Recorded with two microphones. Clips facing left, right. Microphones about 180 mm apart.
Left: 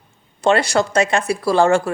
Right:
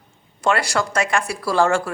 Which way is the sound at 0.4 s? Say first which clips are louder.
Left 4 dB; 25° left (ahead or behind).